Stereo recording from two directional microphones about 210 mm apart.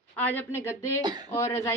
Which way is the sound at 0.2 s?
10° left (ahead or behind).